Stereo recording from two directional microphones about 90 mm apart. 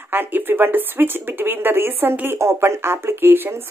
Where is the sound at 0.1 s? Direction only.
20° right (ahead or behind).